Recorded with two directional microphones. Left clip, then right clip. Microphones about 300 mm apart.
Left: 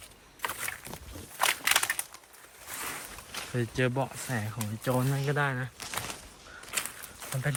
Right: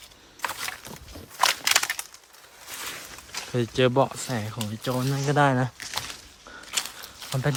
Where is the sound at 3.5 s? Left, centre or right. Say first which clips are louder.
Right 9 dB; centre.